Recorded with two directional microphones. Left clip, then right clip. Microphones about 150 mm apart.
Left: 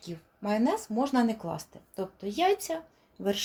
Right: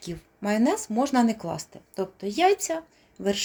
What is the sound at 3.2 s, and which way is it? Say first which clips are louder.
Speech: right 3 dB; 20° right (ahead or behind).